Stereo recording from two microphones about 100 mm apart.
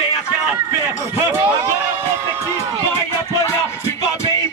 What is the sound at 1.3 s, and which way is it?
Speech, 20° right (ahead or behind).